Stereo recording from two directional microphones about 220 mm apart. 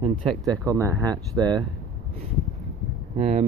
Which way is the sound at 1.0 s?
15° right (ahead or behind).